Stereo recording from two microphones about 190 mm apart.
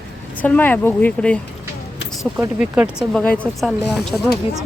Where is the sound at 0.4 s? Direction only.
10° left (ahead or behind).